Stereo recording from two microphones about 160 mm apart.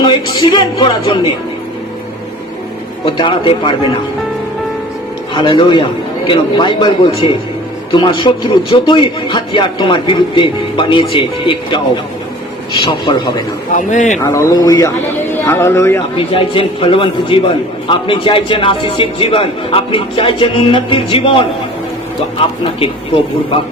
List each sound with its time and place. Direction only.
0.0 s a man's voice: 30° left (ahead or behind)
3.1 s a man's voice: 35° left (ahead or behind)
5.3 s a man's voice: 30° left (ahead or behind)
13.7 s speech: 50° left (ahead or behind)
14.3 s a man's voice: 20° left (ahead or behind)
16.1 s a man's voice: 35° left (ahead or behind)